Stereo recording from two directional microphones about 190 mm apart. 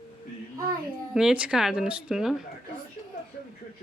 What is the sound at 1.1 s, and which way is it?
Speech, 5° right (ahead or behind).